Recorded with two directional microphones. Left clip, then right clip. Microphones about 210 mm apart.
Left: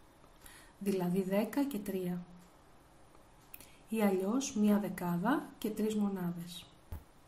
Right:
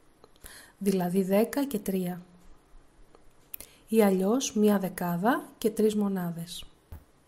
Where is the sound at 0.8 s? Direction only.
45° right (ahead or behind).